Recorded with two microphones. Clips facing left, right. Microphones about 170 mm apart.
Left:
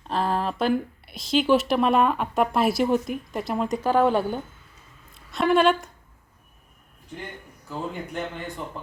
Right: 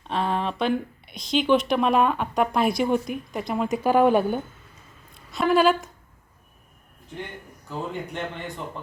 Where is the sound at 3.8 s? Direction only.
15° right (ahead or behind).